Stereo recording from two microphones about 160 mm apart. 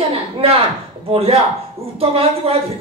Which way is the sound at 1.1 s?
40° right (ahead or behind).